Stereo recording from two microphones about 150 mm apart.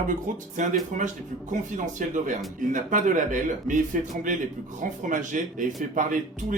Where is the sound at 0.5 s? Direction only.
55° right (ahead or behind).